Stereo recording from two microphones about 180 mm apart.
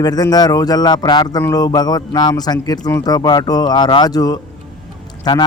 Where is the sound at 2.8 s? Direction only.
10° left (ahead or behind).